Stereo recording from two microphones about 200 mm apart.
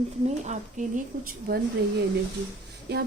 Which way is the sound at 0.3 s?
35° right (ahead or behind).